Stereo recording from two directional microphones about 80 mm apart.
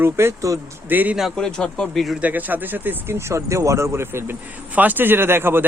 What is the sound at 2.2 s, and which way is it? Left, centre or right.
Speech, right.